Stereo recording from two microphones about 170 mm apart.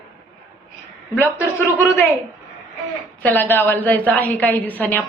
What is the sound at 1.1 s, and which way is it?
Speech, 10° left (ahead or behind).